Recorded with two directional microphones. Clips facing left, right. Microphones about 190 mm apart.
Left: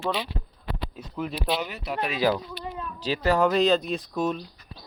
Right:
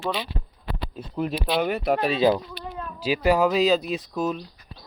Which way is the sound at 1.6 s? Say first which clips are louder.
Right 9 dB; 55° right (ahead or behind).